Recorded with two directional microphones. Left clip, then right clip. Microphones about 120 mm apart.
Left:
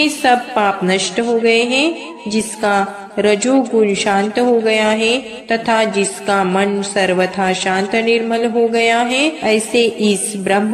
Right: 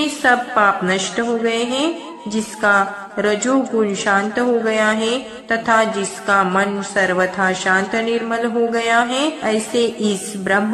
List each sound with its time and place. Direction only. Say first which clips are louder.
0.0 s a woman's voice: left 3 dB; 30° left (ahead or behind)